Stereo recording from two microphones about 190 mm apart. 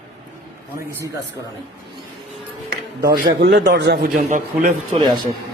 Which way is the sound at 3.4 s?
65° right (ahead or behind).